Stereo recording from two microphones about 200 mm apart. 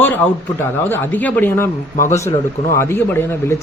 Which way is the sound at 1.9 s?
40° left (ahead or behind).